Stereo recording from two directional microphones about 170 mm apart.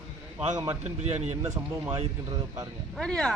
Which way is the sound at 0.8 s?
40° right (ahead or behind).